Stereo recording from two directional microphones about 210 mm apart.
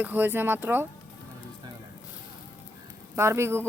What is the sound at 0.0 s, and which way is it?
Speech, 10° right (ahead or behind).